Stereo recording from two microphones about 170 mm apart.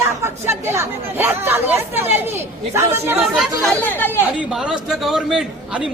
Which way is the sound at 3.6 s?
10° left (ahead or behind).